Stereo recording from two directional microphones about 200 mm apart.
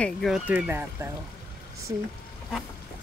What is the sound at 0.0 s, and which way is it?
Speech, centre (ahead or behind).